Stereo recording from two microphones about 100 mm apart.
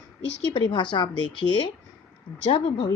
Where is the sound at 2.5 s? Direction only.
60° left (ahead or behind).